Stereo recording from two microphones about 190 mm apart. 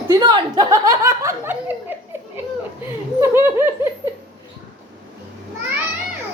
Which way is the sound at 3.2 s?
15° right (ahead or behind).